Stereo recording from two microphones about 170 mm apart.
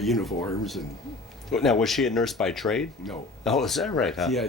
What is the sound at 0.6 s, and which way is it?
Speech, centre (ahead or behind).